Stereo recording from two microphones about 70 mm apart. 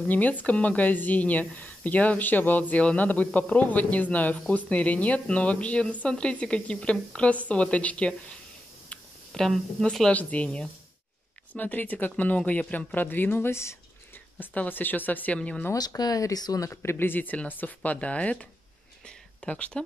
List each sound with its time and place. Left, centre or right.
0.1 s a woman's voice: left
8.8 s a sound: centre
10.1 s speech: left
14.4 s speech: left
15.7 s speech: left
16.9 s speech: left
19.0 s a sound: centre